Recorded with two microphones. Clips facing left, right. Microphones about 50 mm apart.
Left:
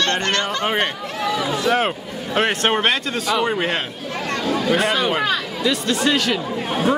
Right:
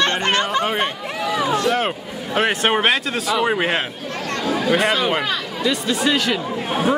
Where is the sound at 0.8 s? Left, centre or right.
Centre.